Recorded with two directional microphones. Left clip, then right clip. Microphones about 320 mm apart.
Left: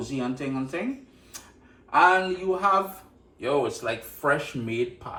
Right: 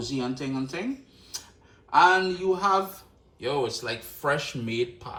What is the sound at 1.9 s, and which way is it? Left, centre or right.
Speech, centre.